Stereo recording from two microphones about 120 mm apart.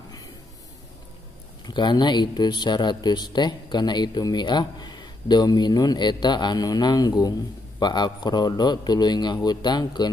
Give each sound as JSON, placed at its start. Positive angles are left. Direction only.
{"t": 1.7, "sound": "speech", "side_deg": 40}